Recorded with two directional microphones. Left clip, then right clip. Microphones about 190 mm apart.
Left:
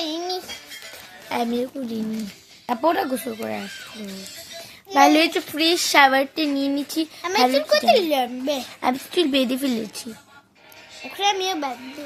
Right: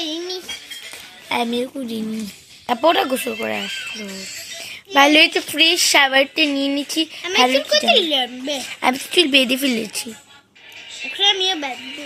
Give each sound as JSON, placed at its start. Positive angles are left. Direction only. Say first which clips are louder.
{"t": 0.0, "sound": "music", "louder": "right 1 dB", "side_deg": 70}
{"t": 1.3, "sound": "a woman's voice", "louder": "right 3 dB", "side_deg": 0}
{"t": 4.9, "sound": "a woman's voice", "louder": "right 3 dB", "side_deg": -5}
{"t": 7.5, "sound": "speech", "louder": "right 2 dB", "side_deg": 65}
{"t": 8.8, "sound": "a woman's voice", "louder": "right 6 dB", "side_deg": 0}
{"t": 11.2, "sound": "a sound", "louder": "right 5 dB", "side_deg": 70}